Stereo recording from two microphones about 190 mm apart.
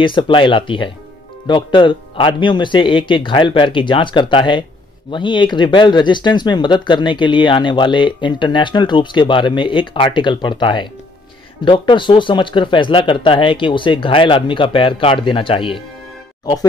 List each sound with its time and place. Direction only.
0.0 s speech: 25° left (ahead or behind)